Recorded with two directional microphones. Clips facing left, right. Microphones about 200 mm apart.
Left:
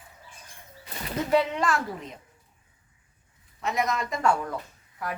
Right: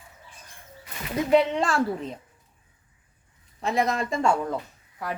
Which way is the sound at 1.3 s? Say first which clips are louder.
Right 3 dB; 25° right (ahead or behind).